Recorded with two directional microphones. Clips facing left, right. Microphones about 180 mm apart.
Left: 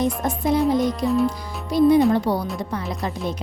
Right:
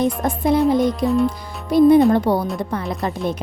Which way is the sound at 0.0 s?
60° right (ahead or behind).